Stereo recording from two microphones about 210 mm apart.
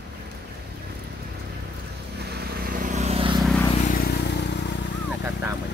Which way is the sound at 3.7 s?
40° left (ahead or behind).